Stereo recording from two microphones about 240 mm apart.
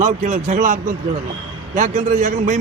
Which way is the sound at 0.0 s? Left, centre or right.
Right.